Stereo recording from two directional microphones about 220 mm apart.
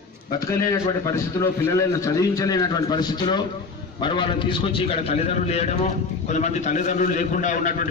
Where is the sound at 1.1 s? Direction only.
15° left (ahead or behind).